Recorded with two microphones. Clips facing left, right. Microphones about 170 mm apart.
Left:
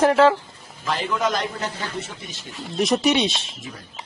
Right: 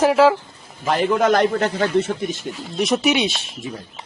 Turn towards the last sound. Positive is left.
turn(degrees=0)  # may be behind; listen again after turning